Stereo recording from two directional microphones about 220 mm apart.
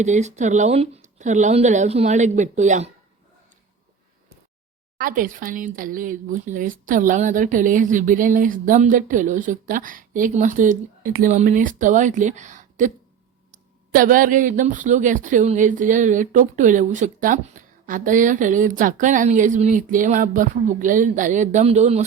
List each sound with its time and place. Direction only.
0.0 s speech: 30° right (ahead or behind)
4.9 s speech: 40° right (ahead or behind)
13.9 s speech: 40° right (ahead or behind)